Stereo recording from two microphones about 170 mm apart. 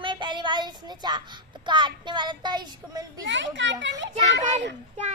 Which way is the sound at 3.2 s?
90° right.